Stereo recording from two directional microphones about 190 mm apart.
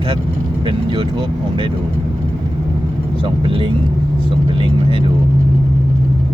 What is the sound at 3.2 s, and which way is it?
Speech, 30° right (ahead or behind).